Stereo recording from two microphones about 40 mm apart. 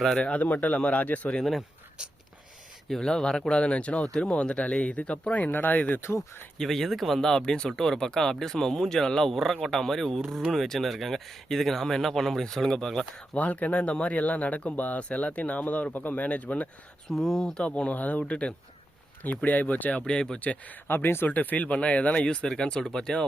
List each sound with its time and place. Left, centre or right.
0.2 s speech: left
0.4 s speech: left
2.9 s speech: centre; by 5.5 s left
5.5 s speech: left
6.0 s speech: left
6.6 s speech: centre
13.3 s speech: left
17.1 s speech: centre
17.6 s speech: left
19.5 s speech: left
19.9 s speech: left
20.4 s speech: left
20.8 s speech: left
21.2 s speech: left; by 23.2 s centre